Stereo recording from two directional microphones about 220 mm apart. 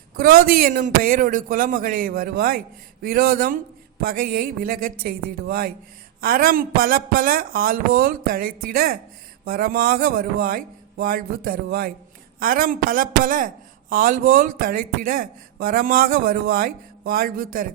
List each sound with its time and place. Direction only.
0.2 s speech: 40° right (ahead or behind)